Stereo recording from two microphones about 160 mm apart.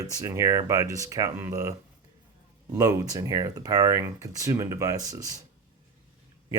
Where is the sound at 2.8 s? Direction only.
20° right (ahead or behind).